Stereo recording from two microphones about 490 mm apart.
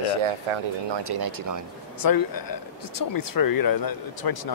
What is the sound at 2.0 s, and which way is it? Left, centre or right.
Speech, left.